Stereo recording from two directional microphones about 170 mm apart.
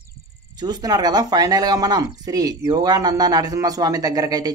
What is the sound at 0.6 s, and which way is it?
Speech, 25° right (ahead or behind).